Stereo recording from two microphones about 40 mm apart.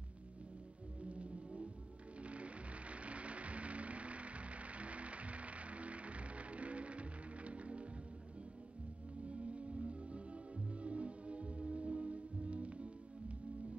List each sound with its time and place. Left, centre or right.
1.0 s music: right
9.2 s music: right